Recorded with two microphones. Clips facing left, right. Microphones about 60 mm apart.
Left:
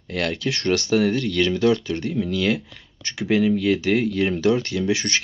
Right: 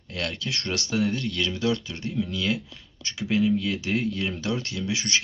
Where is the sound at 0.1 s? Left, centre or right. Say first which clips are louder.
Left 6 dB; left.